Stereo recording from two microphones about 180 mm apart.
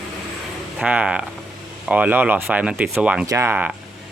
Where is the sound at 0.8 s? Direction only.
5° right (ahead or behind).